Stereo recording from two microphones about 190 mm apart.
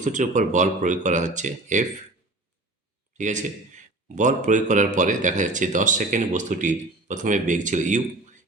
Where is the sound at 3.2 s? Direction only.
40° right (ahead or behind).